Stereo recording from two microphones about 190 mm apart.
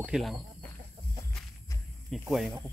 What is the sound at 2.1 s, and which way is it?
Speech, centre (ahead or behind).